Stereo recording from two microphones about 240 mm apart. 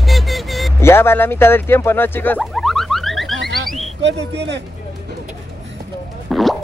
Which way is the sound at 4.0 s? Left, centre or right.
Right.